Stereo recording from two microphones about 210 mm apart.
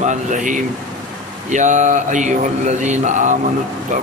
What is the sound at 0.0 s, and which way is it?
Mantra, 35° right (ahead or behind).